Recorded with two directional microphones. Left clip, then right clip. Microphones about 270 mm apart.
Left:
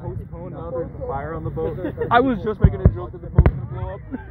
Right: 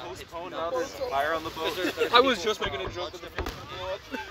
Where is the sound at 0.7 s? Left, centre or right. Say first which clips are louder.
Left 5 dB; right.